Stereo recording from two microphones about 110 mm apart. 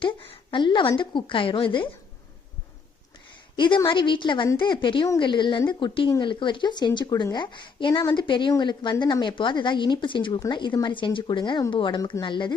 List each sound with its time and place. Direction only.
0.0 s a woman's voice: 55° left (ahead or behind)
3.5 s a woman's voice: 45° left (ahead or behind)